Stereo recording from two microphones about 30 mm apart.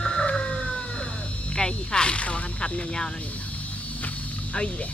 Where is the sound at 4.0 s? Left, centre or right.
Left.